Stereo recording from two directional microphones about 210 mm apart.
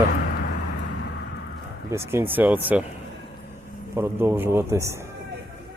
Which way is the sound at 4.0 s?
10° right (ahead or behind).